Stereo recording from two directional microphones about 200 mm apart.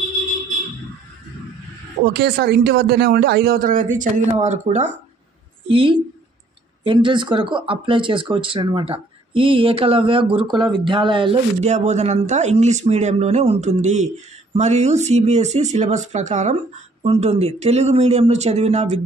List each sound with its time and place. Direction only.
2.1 s a man's voice: 55° right (ahead or behind); by 18.9 s 35° right (ahead or behind)